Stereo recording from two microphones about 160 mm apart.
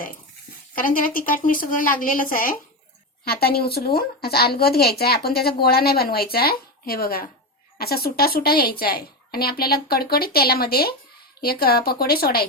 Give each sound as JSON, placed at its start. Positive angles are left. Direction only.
{"t": 0.8, "sound": "a woman's voice", "side_deg": 60}
{"t": 3.2, "sound": "speech", "side_deg": 75}